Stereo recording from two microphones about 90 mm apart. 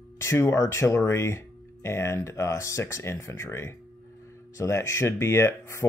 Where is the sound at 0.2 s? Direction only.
30° left (ahead or behind).